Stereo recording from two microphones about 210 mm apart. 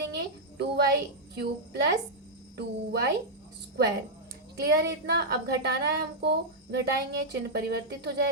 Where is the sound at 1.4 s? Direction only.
50° right (ahead or behind).